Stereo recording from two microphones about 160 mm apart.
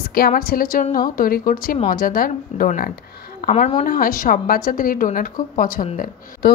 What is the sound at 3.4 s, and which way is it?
Speech, 50° left (ahead or behind).